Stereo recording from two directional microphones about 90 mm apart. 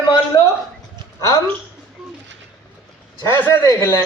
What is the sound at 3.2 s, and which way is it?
Speech, 25° left (ahead or behind).